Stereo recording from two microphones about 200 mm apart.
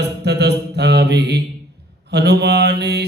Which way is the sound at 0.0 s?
55° right (ahead or behind).